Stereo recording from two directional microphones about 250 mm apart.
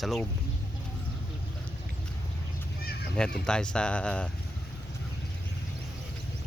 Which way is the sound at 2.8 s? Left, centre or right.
Left.